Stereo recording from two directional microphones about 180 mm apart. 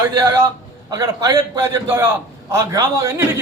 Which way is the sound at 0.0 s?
15° right (ahead or behind).